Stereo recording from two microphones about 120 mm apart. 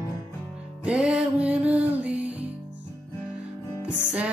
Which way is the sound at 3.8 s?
10° right (ahead or behind).